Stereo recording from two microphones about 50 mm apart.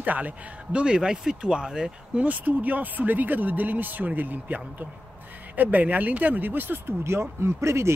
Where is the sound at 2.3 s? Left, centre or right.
Right.